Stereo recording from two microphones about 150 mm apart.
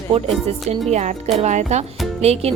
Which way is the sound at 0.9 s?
50° right (ahead or behind).